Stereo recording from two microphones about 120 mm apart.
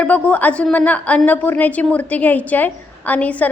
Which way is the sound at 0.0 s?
10° left (ahead or behind).